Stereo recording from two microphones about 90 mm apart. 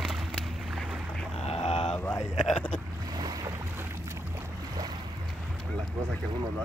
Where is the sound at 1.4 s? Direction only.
90° left.